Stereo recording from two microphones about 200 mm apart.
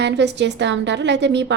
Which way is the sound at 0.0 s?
60° right (ahead or behind).